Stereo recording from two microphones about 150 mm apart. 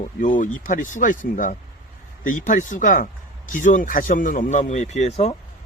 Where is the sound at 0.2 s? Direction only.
60° left (ahead or behind).